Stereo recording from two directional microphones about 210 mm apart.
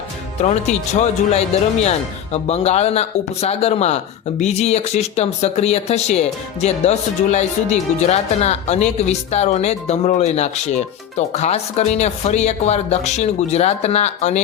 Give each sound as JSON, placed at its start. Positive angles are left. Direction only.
{"t": 0.4, "sound": "speech", "side_deg": 30}